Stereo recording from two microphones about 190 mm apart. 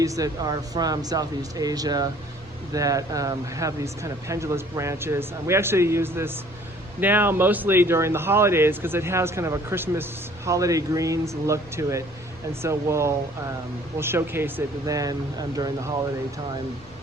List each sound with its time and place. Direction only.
0.0 s speech: 20° right (ahead or behind)